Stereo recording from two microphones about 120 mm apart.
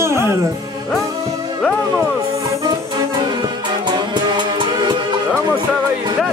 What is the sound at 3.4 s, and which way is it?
Music, 40° right (ahead or behind).